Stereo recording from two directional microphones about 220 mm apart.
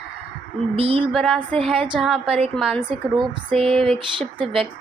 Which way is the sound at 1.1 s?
Centre (ahead or behind).